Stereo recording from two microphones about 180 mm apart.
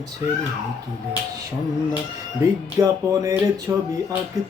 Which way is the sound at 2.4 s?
20° right (ahead or behind).